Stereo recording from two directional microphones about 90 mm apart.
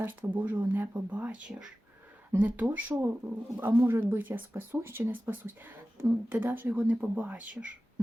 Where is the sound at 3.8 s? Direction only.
30° right (ahead or behind).